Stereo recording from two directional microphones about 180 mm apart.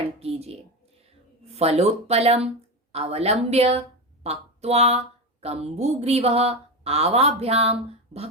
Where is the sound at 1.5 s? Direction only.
35° right (ahead or behind).